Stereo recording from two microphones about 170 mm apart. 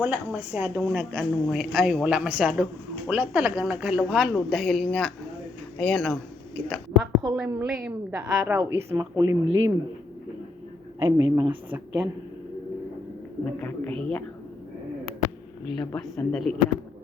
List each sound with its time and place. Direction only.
0.0 s a woman's voice: 10° right (ahead or behind)
11.0 s a woman's voice: 20° right (ahead or behind)
13.6 s speech: 5° left (ahead or behind)
15.7 s speech: 20° left (ahead or behind)
16.1 s speech: 5° left (ahead or behind)